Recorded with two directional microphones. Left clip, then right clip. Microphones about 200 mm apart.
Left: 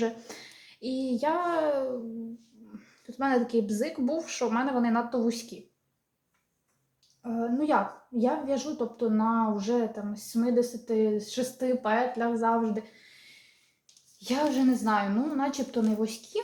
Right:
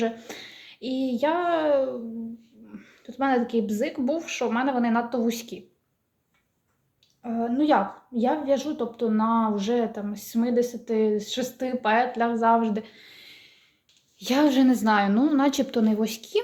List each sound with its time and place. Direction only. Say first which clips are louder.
0.0 s a child's voice: right 3 dB; 25° right (ahead or behind)
7.2 s a woman's voice: right 4 dB; 30° right (ahead or behind)
14.2 s a woman's voice: right 6 dB; 55° right (ahead or behind)